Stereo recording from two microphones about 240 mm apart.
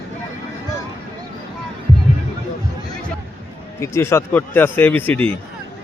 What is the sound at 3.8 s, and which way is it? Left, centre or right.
A man's voice, centre.